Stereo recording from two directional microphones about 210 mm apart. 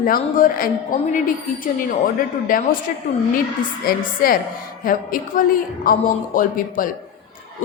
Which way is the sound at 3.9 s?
45° left (ahead or behind).